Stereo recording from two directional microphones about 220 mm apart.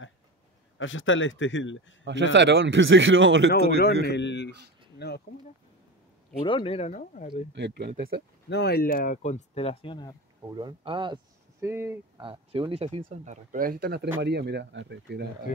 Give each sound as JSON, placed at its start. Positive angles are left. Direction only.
{"t": 0.7, "sound": "speech", "side_deg": 60}
{"t": 2.0, "sound": "speech", "side_deg": -55}
{"t": 4.0, "sound": "a man's voice", "side_deg": 50}
{"t": 6.4, "sound": "speech", "side_deg": 25}
{"t": 7.5, "sound": "speech", "side_deg": -50}
{"t": 8.5, "sound": "speech", "side_deg": 50}
{"t": 10.5, "sound": "speech", "side_deg": -20}
{"t": 11.6, "sound": "speech", "side_deg": -10}
{"t": 12.2, "sound": "speech", "side_deg": -25}